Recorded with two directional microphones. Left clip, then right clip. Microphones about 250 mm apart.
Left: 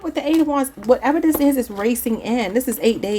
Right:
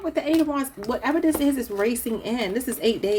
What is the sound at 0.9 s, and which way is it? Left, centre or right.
A woman's voice, left.